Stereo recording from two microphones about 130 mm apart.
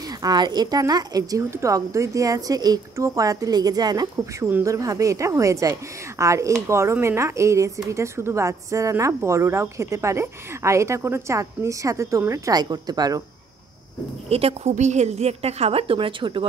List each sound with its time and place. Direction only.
0.2 s a woman's voice: 30° right (ahead or behind)
14.3 s a woman's voice: 55° right (ahead or behind)